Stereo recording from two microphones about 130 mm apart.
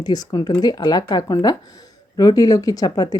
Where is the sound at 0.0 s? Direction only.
30° left (ahead or behind).